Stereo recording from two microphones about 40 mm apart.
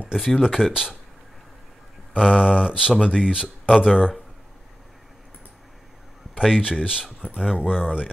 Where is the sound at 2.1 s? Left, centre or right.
Centre.